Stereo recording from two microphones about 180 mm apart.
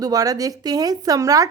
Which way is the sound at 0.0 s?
20° right (ahead or behind).